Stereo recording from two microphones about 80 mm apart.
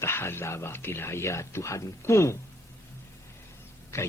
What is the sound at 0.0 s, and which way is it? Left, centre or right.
Speech, left.